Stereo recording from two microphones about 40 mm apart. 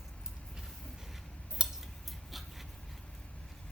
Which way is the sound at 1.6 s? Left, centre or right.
Right.